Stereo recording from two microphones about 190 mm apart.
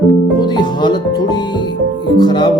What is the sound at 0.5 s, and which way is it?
Music, 25° left (ahead or behind).